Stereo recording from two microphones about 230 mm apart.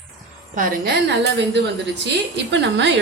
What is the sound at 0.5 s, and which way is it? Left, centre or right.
Speech, right.